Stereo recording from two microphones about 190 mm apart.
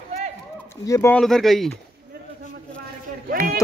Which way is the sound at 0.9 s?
10° left (ahead or behind).